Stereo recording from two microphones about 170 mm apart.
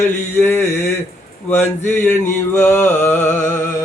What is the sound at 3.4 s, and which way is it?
Music, 15° left (ahead or behind).